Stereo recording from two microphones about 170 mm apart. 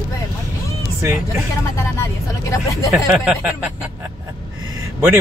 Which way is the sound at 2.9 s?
5° right (ahead or behind).